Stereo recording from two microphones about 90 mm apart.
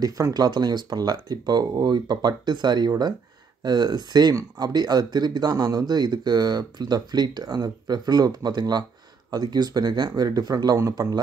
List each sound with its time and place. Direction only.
0.0 s speech: 45° right (ahead or behind)